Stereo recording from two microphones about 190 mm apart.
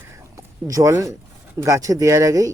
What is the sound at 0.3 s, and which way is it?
Speech, 15° right (ahead or behind).